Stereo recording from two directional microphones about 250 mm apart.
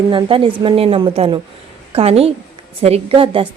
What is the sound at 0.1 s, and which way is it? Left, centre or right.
A woman's voice, centre.